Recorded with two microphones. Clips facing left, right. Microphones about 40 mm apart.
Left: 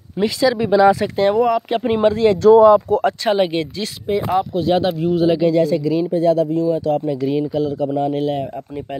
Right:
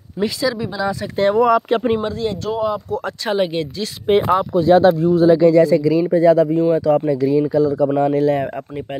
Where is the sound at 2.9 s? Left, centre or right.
Centre.